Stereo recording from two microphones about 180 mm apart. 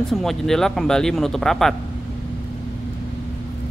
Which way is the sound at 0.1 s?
Centre (ahead or behind).